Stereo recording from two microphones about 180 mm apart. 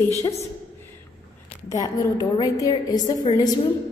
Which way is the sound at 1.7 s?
20° left (ahead or behind).